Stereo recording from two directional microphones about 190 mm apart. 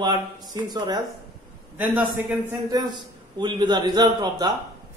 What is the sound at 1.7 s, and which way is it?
A man's voice, 10° right (ahead or behind).